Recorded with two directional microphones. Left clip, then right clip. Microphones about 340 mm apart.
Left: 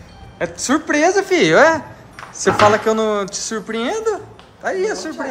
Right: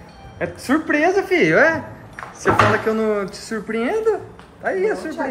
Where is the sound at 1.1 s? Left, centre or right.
Left.